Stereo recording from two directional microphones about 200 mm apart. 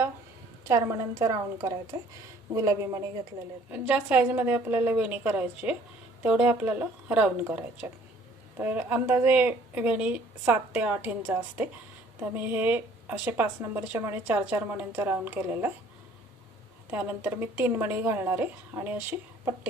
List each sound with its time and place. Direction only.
0.7 s a woman's voice: 15° right (ahead or behind)
16.9 s a woman's voice: 10° right (ahead or behind)